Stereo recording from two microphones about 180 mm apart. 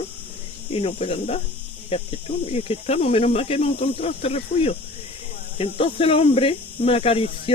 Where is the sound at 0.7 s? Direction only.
35° left (ahead or behind).